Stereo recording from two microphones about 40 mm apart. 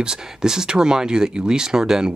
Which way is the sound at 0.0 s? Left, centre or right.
Centre.